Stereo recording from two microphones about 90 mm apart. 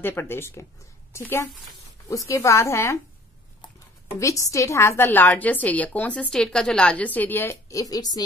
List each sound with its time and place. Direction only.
0.0 s a woman's voice: 25° left (ahead or behind)
4.2 s a woman's voice: 35° left (ahead or behind)
7.7 s speech: 45° left (ahead or behind)